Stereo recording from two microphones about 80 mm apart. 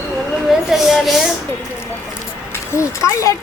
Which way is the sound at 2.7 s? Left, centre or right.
Left.